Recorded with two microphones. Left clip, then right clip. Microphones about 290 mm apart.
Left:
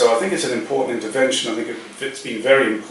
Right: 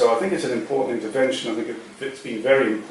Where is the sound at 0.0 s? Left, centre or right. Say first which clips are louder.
Left 3 dB; centre.